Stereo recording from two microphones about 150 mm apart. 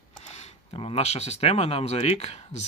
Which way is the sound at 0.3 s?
45° left (ahead or behind).